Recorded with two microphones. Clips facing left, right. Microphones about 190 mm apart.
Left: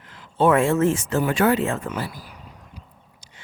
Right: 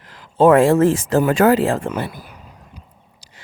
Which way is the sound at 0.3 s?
35° right (ahead or behind).